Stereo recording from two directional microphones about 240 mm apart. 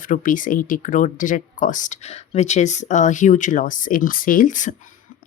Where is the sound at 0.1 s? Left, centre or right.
Left.